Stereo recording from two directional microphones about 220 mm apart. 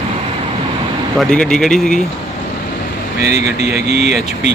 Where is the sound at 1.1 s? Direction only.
5° left (ahead or behind).